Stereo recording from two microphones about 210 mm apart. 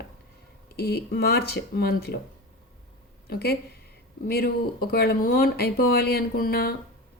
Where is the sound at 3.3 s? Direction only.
50° left (ahead or behind).